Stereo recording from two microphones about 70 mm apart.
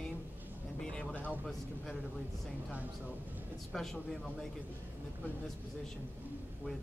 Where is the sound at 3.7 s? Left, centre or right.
Centre.